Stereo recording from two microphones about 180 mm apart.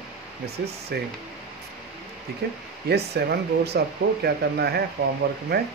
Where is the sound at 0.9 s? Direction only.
65° right (ahead or behind).